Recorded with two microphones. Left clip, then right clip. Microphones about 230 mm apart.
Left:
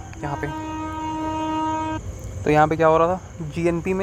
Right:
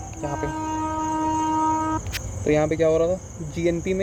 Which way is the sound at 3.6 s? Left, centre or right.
Left.